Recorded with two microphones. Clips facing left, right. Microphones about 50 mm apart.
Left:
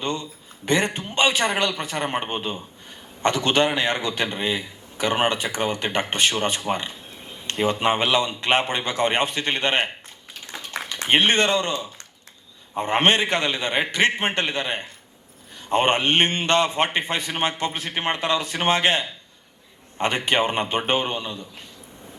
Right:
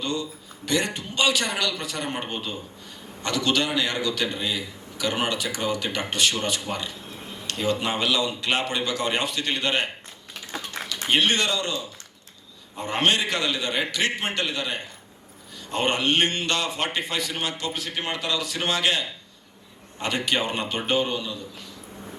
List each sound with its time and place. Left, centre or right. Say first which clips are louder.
0.0 s a man's voice: left 1 dB; left
11.1 s a man's voice: left 4 dB; left